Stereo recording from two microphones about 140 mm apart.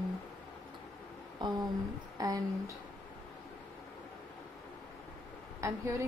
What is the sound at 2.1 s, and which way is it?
Speech, 25° right (ahead or behind).